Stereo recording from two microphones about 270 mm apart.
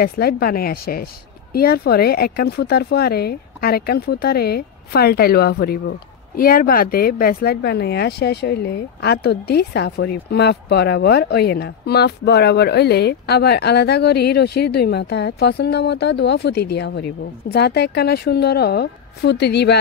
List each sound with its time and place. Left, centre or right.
0.0 s speech: left